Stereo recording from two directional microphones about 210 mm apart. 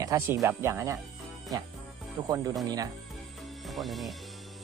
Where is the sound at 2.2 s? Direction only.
15° right (ahead or behind).